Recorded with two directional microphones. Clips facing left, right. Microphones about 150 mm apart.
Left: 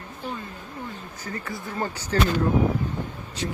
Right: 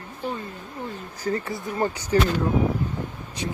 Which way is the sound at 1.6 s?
15° right (ahead or behind).